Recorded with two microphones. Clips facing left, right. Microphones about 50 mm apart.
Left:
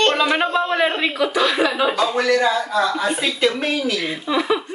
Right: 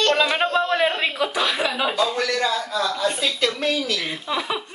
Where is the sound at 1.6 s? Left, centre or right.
Centre.